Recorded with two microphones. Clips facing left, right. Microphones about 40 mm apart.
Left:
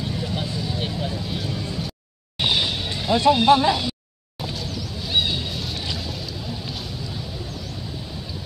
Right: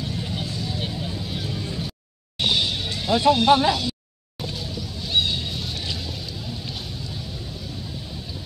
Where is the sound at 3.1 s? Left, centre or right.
Centre.